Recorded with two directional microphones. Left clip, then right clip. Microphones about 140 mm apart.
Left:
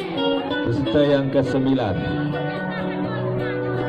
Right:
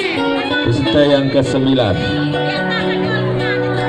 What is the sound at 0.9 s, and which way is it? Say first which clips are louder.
Speech: right 6 dB; 40° left (ahead or behind).